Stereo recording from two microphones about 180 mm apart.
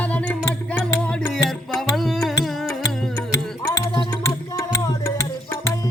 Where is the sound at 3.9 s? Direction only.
25° left (ahead or behind).